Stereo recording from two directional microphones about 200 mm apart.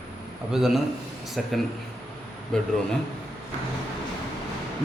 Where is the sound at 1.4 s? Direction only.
Centre (ahead or behind).